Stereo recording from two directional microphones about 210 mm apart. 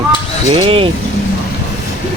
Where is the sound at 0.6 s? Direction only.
25° right (ahead or behind).